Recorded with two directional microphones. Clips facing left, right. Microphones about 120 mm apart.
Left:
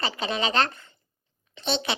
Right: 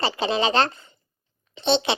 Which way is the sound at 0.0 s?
30° right (ahead or behind).